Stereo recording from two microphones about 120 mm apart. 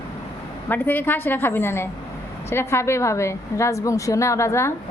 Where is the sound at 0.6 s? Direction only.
15° left (ahead or behind).